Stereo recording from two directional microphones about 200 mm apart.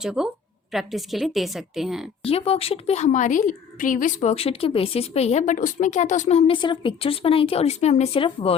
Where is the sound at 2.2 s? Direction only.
30° left (ahead or behind).